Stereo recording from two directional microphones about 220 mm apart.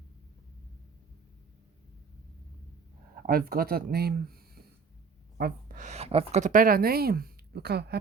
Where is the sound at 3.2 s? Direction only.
40° right (ahead or behind).